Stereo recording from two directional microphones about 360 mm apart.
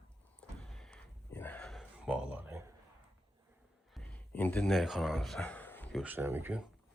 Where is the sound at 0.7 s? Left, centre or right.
Centre.